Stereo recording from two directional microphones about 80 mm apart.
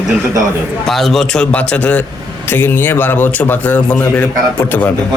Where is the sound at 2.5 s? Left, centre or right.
Left.